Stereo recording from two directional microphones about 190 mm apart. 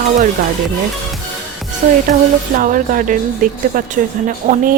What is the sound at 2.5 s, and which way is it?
A woman's voice, 45° right (ahead or behind).